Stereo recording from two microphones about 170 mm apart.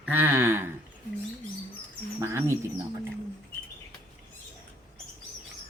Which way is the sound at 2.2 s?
15° right (ahead or behind).